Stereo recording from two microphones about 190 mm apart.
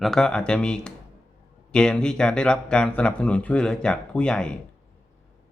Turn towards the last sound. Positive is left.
turn(degrees=5)  # may be behind; listen again after turning